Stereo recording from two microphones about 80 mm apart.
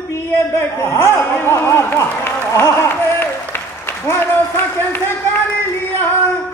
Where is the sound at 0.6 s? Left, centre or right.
Left.